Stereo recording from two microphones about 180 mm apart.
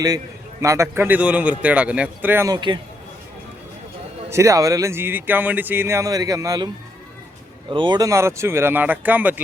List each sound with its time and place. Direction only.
0.6 s speech: 15° right (ahead or behind)
4.3 s speech: 15° right (ahead or behind)
7.7 s speech: 25° right (ahead or behind); by 9.3 s 10° right (ahead or behind)